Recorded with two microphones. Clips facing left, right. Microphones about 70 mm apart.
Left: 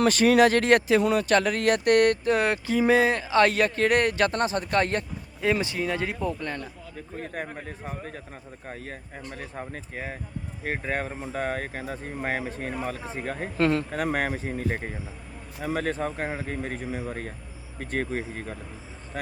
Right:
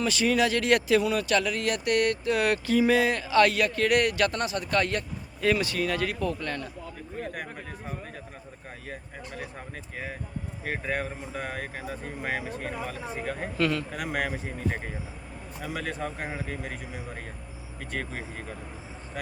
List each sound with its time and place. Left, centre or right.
0.0 s speech: left
5.4 s speech: left
7.5 s speech: left